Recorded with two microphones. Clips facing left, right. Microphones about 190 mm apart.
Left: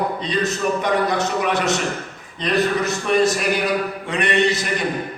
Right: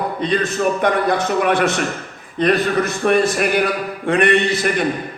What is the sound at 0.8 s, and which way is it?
A man's voice, 55° right (ahead or behind).